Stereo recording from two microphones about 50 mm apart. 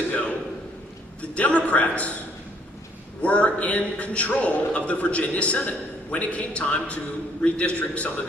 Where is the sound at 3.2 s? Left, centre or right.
Left.